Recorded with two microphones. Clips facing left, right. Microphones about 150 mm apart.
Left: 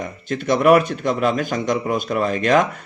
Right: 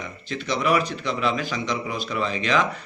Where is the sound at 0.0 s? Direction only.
50° left (ahead or behind).